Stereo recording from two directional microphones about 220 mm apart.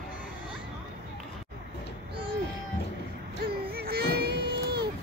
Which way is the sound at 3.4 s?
45° right (ahead or behind).